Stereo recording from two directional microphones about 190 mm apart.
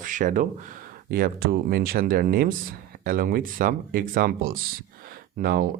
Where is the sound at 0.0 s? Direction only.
40° right (ahead or behind).